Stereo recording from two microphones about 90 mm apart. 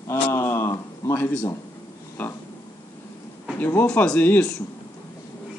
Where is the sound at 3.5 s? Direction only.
20° left (ahead or behind).